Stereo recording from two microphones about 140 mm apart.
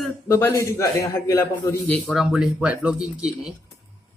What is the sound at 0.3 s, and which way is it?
A man's voice, 15° left (ahead or behind).